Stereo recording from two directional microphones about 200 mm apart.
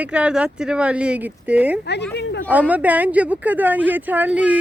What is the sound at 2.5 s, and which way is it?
Speech, 5° right (ahead or behind).